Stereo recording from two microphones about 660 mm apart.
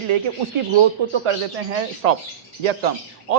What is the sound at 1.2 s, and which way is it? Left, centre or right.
A man's voice, right.